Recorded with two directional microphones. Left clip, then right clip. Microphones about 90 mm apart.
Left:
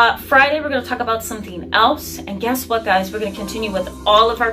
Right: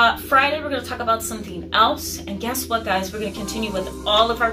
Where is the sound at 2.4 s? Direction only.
30° right (ahead or behind).